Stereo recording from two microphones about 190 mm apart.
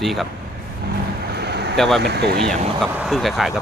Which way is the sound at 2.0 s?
60° right (ahead or behind).